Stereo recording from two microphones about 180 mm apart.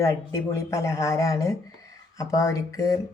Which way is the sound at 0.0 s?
15° left (ahead or behind).